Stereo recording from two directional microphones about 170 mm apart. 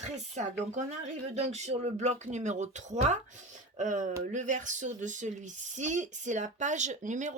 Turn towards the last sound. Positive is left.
turn(degrees=-45)  # may be behind; listen again after turning